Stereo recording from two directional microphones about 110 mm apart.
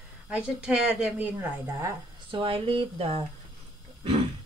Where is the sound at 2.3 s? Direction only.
55° right (ahead or behind).